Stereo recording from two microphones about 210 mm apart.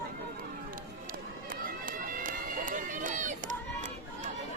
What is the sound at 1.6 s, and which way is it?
Run, 40° right (ahead or behind).